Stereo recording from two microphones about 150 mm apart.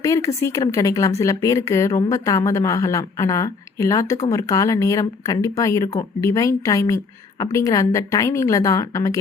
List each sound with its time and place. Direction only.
0.0 s speech: 20° left (ahead or behind)